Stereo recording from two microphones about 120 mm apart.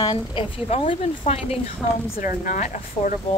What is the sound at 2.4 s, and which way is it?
Speech, 90° left.